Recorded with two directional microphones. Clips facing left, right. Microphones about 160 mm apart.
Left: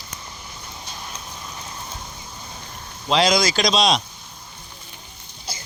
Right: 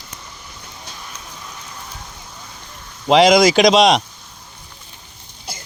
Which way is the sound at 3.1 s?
90° right.